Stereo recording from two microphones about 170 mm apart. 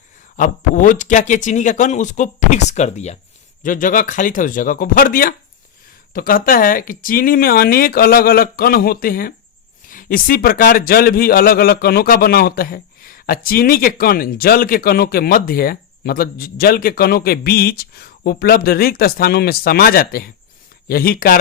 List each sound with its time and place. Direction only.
0.3 s speech: 50° left (ahead or behind)
3.6 s a man's voice: 50° left (ahead or behind)